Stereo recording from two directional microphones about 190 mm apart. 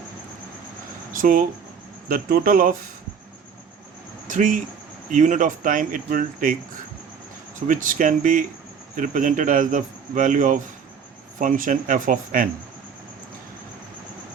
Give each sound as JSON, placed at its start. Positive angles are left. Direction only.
{"t": 1.1, "sound": "a man's voice", "side_deg": -45}
{"t": 4.3, "sound": "a man's voice", "side_deg": -45}
{"t": 7.7, "sound": "a man's voice", "side_deg": -45}